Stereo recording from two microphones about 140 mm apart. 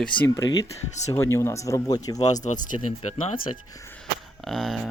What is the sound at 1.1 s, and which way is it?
Speech, 20° left (ahead or behind).